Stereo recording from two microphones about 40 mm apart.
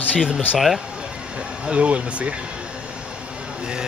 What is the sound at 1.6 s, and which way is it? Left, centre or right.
Speech, right.